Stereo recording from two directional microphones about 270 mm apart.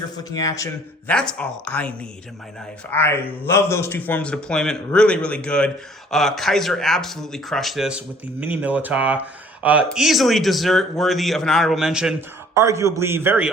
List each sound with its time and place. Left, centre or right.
0.3 s a man's voice: centre
2.9 s a man's voice: centre